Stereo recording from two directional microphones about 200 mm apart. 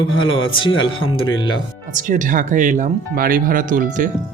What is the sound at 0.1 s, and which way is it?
Speech, 80° left.